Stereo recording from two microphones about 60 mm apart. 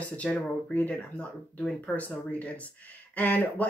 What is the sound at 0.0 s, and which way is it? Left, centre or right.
Speech, left.